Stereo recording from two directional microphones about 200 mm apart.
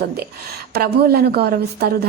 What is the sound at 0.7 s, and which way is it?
A woman's voice, 50° right (ahead or behind).